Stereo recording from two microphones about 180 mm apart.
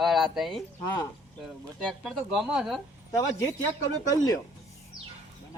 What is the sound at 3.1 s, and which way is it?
Speech, 15° left (ahead or behind).